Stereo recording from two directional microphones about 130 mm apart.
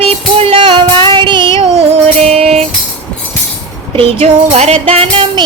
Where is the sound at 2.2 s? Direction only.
55° right (ahead or behind).